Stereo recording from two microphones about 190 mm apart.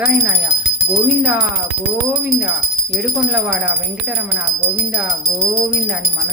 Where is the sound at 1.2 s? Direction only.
10° right (ahead or behind).